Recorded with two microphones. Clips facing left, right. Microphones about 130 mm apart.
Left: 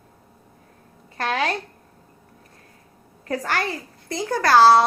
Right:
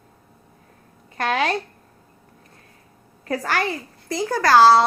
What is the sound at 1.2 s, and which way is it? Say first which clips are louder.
Speech: right 2 dB; 20° right (ahead or behind).